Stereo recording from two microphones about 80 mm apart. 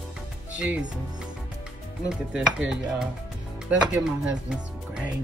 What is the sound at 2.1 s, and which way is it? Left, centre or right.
Music, centre.